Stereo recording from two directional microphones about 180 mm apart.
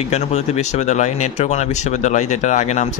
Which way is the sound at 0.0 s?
40° left (ahead or behind).